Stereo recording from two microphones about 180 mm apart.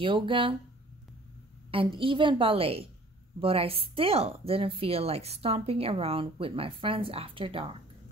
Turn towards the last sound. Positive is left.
turn(degrees=-30)  # may be behind; listen again after turning